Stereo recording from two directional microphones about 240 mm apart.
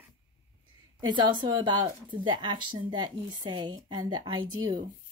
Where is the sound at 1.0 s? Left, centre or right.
Centre.